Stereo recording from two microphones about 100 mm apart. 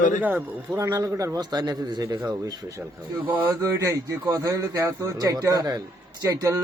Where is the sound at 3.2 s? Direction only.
15° right (ahead or behind).